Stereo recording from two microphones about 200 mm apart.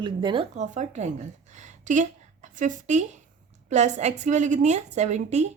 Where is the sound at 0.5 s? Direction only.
35° right (ahead or behind).